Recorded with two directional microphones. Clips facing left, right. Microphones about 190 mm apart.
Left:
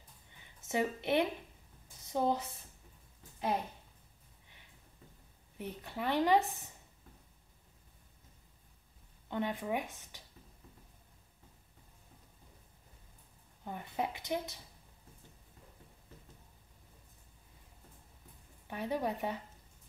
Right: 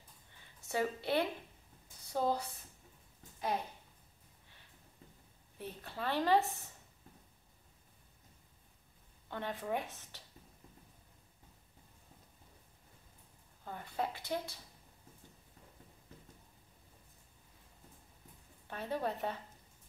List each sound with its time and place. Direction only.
0.4 s a sound: 20° left (ahead or behind)
2.1 s speech: 20° left (ahead or behind)
5.6 s speech: 15° left (ahead or behind)
9.3 s speech: 15° left (ahead or behind)
13.7 s speech: 15° left (ahead or behind)
18.7 s speech: 15° left (ahead or behind)